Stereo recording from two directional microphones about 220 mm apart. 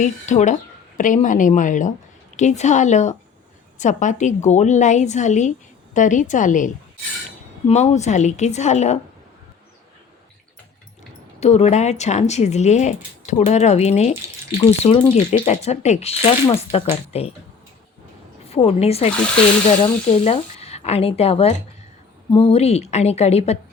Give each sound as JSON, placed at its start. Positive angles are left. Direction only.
{"t": 0.0, "sound": "speech", "side_deg": 35}
{"t": 7.7, "sound": "speech", "side_deg": 30}
{"t": 11.3, "sound": "speech", "side_deg": 30}
{"t": 18.4, "sound": "speech", "side_deg": 25}